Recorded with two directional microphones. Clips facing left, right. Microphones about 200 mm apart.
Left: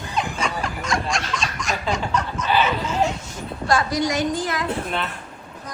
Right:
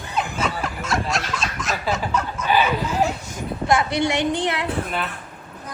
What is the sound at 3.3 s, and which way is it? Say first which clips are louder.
Speech: right 2 dB; 20° right (ahead or behind).